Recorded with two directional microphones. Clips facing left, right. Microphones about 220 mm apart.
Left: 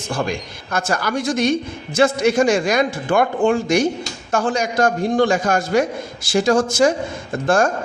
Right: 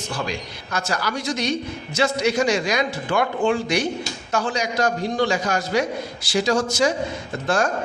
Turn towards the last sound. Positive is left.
turn(degrees=50)  # may be behind; listen again after turning